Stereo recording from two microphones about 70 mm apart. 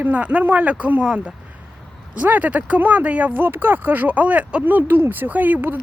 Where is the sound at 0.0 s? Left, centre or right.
Right.